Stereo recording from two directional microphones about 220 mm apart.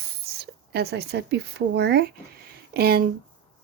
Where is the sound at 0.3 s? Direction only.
45° right (ahead or behind).